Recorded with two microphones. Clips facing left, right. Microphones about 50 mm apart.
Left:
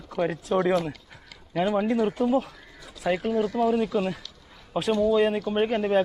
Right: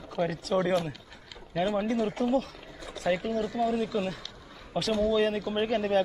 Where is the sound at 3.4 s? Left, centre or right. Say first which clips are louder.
Left 4 dB; left.